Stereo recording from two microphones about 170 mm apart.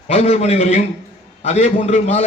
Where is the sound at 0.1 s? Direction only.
35° left (ahead or behind).